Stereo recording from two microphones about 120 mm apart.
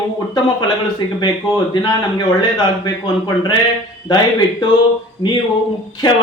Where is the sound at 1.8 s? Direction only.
35° left (ahead or behind).